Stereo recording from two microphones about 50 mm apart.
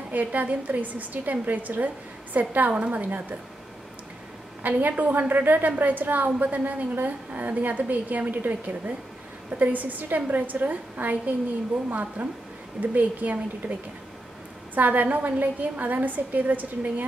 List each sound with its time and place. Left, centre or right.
0.1 s a woman's voice: right
4.6 s a woman's voice: right
14.8 s a woman's voice: right